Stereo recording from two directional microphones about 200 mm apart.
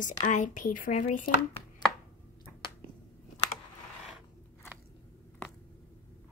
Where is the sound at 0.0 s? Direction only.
40° left (ahead or behind).